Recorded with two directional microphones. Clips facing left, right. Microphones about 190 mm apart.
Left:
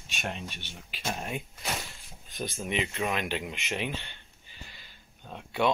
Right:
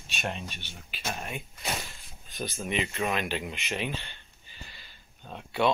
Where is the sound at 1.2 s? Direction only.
25° left (ahead or behind).